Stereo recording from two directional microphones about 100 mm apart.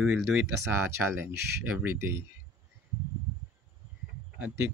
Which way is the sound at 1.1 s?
25° right (ahead or behind).